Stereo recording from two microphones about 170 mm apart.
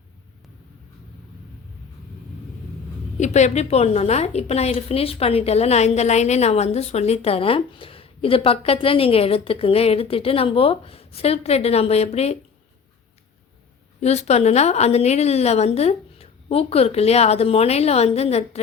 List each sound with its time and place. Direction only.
3.2 s a woman's voice: 45° left (ahead or behind)
14.0 s a woman's voice: 40° left (ahead or behind)